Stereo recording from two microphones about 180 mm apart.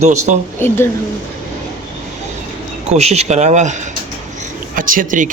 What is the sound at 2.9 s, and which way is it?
Speech, 35° right (ahead or behind).